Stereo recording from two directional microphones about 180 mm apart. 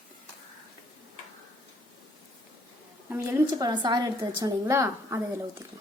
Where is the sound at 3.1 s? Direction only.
15° right (ahead or behind).